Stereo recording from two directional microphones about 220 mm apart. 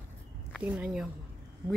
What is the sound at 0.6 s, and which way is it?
Speech, 5° right (ahead or behind).